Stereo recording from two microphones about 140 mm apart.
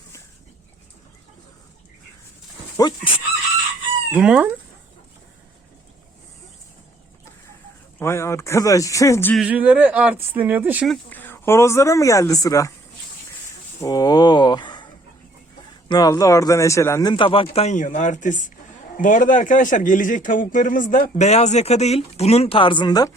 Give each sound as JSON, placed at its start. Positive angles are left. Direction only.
{"t": 2.7, "sound": "a man's voice", "side_deg": 30}
{"t": 4.1, "sound": "speech", "side_deg": -10}
{"t": 7.9, "sound": "speech", "side_deg": 20}
{"t": 9.5, "sound": "speech", "side_deg": -10}
{"t": 11.1, "sound": "speech", "side_deg": 15}
{"t": 13.8, "sound": "speech", "side_deg": 25}
{"t": 15.9, "sound": "a man's voice", "side_deg": 25}